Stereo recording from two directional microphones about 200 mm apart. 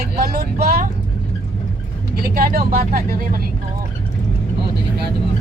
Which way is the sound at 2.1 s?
50° right (ahead or behind).